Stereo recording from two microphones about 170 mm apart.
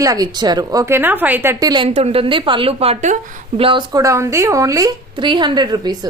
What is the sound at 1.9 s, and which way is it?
A woman's voice, 40° right (ahead or behind).